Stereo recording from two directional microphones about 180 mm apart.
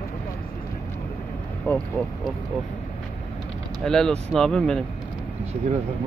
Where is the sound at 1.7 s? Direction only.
10° left (ahead or behind).